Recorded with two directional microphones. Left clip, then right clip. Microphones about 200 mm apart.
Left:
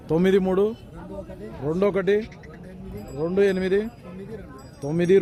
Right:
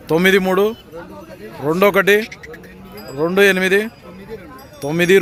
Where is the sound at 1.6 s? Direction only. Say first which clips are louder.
Right 9 dB; 20° right (ahead or behind).